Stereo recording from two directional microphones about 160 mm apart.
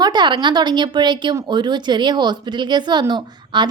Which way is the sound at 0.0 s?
30° right (ahead or behind).